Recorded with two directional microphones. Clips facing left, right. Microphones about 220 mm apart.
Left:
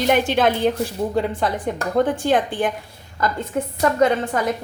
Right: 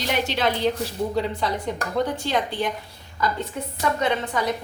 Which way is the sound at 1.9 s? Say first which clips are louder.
Left 6 dB; 50° left (ahead or behind).